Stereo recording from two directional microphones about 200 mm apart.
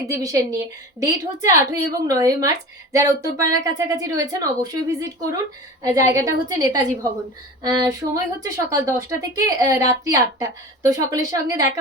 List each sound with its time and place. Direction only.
0.1 s a woman's voice: 15° right (ahead or behind)